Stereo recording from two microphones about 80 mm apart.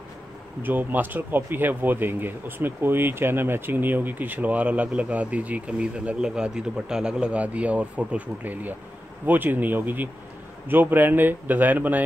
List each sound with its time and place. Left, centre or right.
0.6 s speech: right